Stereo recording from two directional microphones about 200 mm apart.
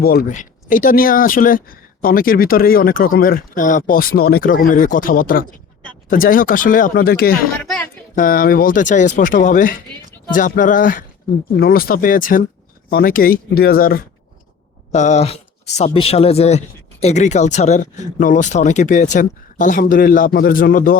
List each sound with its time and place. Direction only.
0.0 s speech: 50° left (ahead or behind)
7.6 s a sound: 5° left (ahead or behind)
8.1 s speech: 45° left (ahead or behind)
14.9 s speech: 35° left (ahead or behind)